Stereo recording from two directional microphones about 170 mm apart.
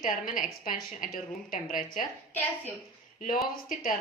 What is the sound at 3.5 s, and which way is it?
Speech, 55° left (ahead or behind).